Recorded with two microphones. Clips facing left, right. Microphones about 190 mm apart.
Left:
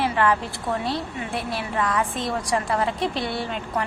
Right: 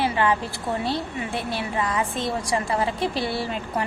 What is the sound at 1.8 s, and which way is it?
Speech, 20° right (ahead or behind).